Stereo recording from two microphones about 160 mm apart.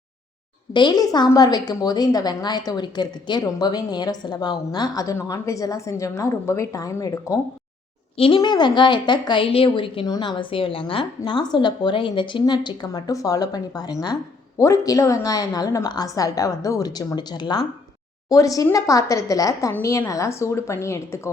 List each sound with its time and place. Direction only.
0.7 s a woman's voice: 25° left (ahead or behind)